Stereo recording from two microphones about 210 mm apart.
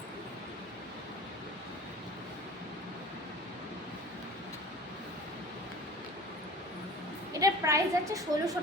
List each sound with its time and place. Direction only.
7.3 s a woman's voice: 15° right (ahead or behind)